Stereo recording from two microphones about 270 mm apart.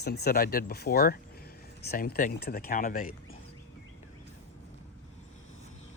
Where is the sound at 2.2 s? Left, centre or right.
Left.